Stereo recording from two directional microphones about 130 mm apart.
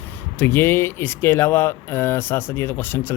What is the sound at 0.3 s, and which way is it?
Speech, 15° left (ahead or behind).